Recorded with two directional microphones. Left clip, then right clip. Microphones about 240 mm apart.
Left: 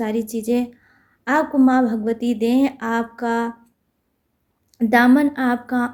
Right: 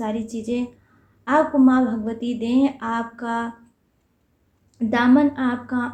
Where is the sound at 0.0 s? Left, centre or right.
Left.